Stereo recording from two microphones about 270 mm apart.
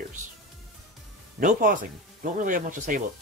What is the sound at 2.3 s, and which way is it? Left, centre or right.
Speech, right.